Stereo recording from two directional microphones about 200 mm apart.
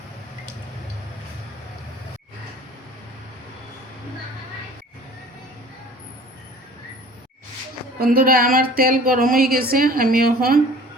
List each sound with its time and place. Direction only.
7.9 s a woman's voice: 45° right (ahead or behind)